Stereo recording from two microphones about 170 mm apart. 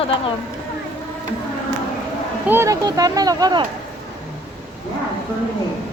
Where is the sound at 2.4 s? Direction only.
15° right (ahead or behind).